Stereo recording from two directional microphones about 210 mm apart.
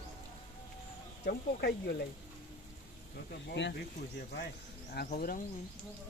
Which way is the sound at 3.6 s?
55° left (ahead or behind).